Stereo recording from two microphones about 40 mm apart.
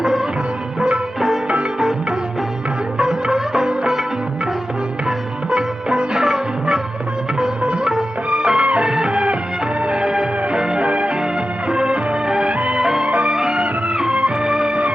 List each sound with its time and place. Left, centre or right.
0.0 s music: centre
3.0 s music: centre
5.0 s music: right
8.3 s music: right
12.5 s music: right
12.8 s music: centre
14.7 s music: right